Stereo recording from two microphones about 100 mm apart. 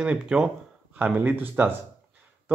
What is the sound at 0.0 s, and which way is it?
Speech, 10° right (ahead or behind).